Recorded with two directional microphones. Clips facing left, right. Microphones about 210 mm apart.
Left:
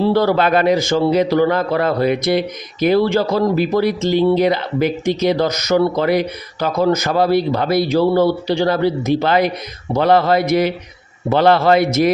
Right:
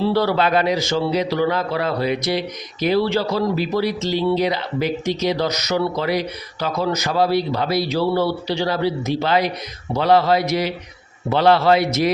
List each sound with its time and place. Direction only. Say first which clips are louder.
0.1 s speech: left 3 dB; 50° left (ahead or behind)